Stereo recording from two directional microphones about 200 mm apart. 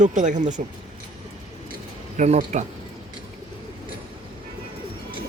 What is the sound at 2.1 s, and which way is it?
Speech, 35° right (ahead or behind).